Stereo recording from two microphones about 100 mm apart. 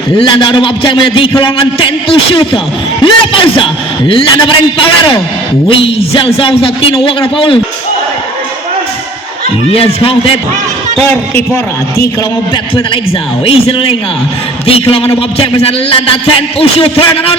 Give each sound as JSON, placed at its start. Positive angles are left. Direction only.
{"t": 0.2, "sound": "a man's voice", "side_deg": 60}
{"t": 9.7, "sound": "a man's voice", "side_deg": 70}
{"t": 11.0, "sound": "a man's voice", "side_deg": 20}
{"t": 13.4, "sound": "a man's voice", "side_deg": 65}